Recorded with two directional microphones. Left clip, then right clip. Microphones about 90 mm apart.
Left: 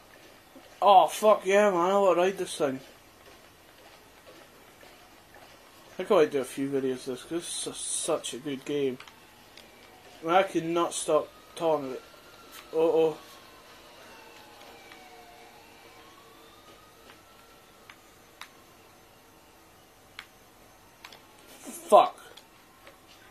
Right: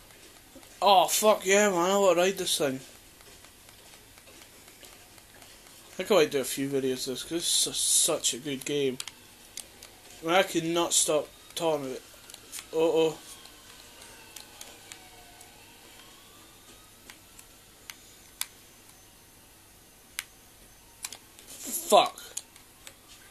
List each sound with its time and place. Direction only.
0.7 s speech: 30° right (ahead or behind)
5.9 s speech: 25° right (ahead or behind)
10.2 s speech: 25° right (ahead or behind)
21.6 s a sound: 20° right (ahead or behind)